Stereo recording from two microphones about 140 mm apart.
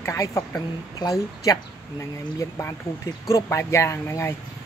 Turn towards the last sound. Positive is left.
turn(degrees=20)  # may be behind; listen again after turning